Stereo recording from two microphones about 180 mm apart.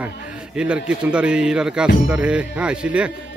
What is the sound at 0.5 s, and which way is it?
A man's voice, 5° right (ahead or behind).